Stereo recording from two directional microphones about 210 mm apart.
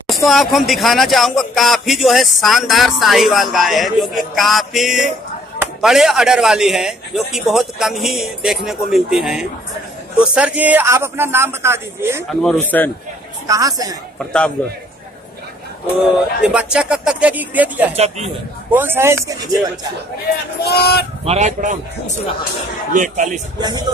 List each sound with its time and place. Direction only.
0.1 s a man's voice: centre (ahead or behind)
12.3 s speech: centre (ahead or behind)
13.5 s a man's voice: 15° right (ahead or behind)
16.0 s speech: 5° right (ahead or behind)
17.9 s speech: 30° right (ahead or behind)
18.7 s a man's voice: 10° right (ahead or behind)
20.6 s speech: 50° left (ahead or behind)
21.2 s speech: 30° right (ahead or behind)
22.9 s speech: 35° right (ahead or behind)
23.6 s speech: 20° right (ahead or behind)